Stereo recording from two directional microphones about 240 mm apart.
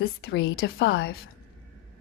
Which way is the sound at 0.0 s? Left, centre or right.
Left.